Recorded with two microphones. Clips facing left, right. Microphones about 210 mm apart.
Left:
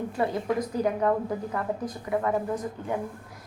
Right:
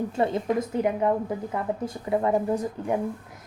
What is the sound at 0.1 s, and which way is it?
A woman's voice, 25° right (ahead or behind).